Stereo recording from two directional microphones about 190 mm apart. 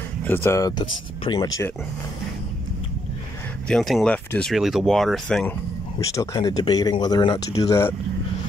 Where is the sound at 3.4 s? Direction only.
5° left (ahead or behind).